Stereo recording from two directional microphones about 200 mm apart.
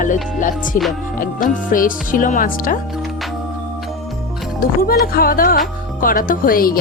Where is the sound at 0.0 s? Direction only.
40° left (ahead or behind).